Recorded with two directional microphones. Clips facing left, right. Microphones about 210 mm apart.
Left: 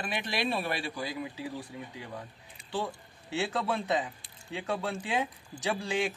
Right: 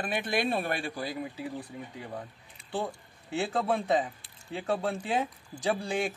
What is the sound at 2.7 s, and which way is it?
Speech, 50° right (ahead or behind).